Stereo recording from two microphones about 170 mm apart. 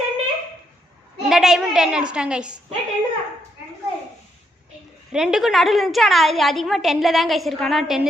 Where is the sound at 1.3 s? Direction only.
Centre (ahead or behind).